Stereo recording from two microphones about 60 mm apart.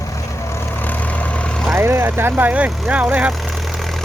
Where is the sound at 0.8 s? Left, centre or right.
Left.